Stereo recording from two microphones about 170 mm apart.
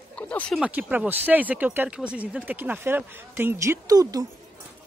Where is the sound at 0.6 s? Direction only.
10° right (ahead or behind).